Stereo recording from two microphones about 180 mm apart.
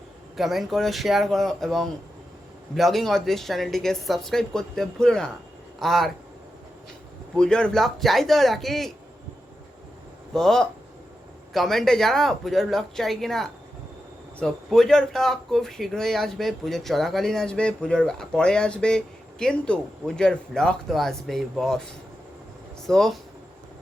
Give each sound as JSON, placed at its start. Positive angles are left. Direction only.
{"t": 0.3, "sound": "speech", "side_deg": 0}
{"t": 7.3, "sound": "speech", "side_deg": 5}
{"t": 10.3, "sound": "speech", "side_deg": 5}
{"t": 22.9, "sound": "speech", "side_deg": 0}